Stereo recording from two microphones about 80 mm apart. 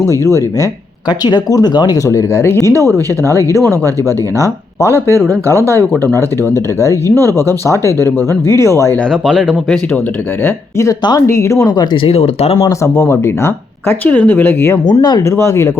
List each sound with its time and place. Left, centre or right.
0.0 s speech: left
1.2 s speech: left
1.7 s speech: left
2.0 s speech: left
4.9 s speech: right
5.5 s speech: left
9.2 s speech: centre
10.4 s speech: left
13.0 s speech: left
14.0 s speech: left
14.8 s speech: left
15.4 s speech: left